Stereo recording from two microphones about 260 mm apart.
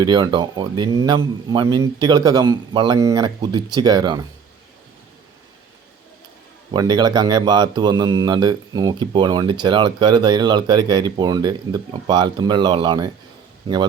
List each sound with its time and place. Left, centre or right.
0.0 s speech: centre
6.7 s speech: centre